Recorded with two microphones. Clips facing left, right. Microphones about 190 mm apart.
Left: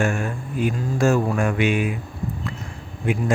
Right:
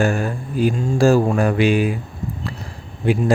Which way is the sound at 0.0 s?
35° right (ahead or behind).